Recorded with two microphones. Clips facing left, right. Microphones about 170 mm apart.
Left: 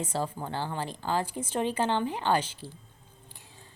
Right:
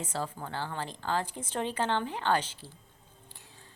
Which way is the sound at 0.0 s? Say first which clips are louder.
Left 4 dB; 15° left (ahead or behind).